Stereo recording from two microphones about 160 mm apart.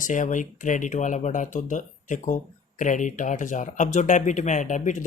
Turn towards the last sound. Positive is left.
turn(degrees=50)  # may be behind; listen again after turning